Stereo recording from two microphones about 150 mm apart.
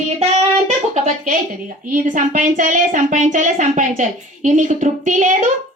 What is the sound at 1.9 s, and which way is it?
Speech, 60° right (ahead or behind).